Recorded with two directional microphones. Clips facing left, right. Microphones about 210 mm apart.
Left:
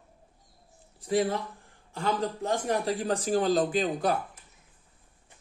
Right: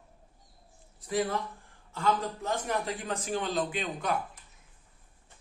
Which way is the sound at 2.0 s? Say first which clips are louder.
Left 1 dB; 35° left (ahead or behind).